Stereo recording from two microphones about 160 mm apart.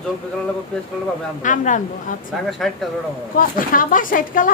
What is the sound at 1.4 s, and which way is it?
Speech, 50° left (ahead or behind).